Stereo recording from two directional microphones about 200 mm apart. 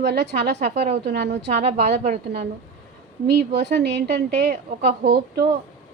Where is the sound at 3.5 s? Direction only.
60° right (ahead or behind).